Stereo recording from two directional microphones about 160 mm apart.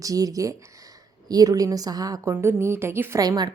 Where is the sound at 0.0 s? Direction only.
20° right (ahead or behind).